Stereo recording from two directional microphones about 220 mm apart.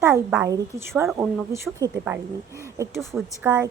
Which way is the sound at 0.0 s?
10° right (ahead or behind).